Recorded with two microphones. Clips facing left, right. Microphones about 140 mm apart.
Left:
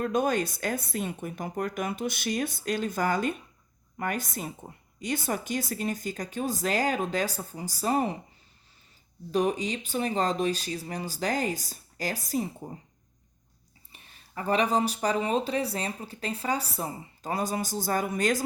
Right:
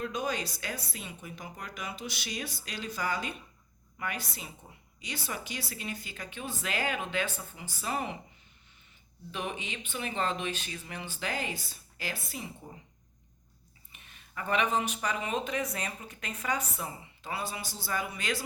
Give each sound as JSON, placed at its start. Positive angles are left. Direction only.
{"t": 0.0, "sound": "speech", "side_deg": 50}
{"t": 9.3, "sound": "speech", "side_deg": 40}
{"t": 13.9, "sound": "speech", "side_deg": 35}